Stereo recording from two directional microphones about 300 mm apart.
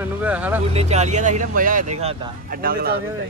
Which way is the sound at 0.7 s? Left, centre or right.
Right.